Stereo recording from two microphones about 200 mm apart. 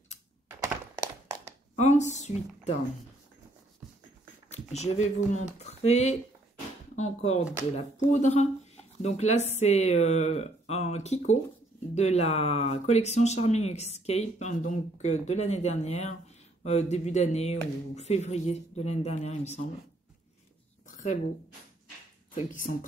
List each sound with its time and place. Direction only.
0.6 s tap: 15° right (ahead or behind)
1.8 s speech: 35° left (ahead or behind)
4.5 s speech: 35° left (ahead or behind)
20.8 s a sound: 40° left (ahead or behind)
22.5 s speech: 40° left (ahead or behind)